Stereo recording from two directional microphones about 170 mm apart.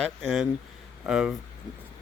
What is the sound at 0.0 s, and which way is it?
Speech, centre (ahead or behind).